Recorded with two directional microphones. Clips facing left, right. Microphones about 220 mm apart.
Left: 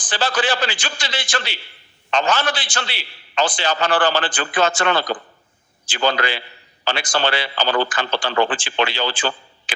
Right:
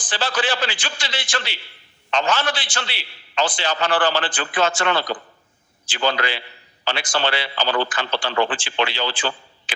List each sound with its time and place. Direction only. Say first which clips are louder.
0.1 s a man's voice: left 2 dB; 45° left (ahead or behind)